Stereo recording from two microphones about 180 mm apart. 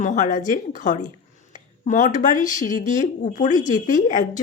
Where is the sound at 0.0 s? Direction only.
45° left (ahead or behind).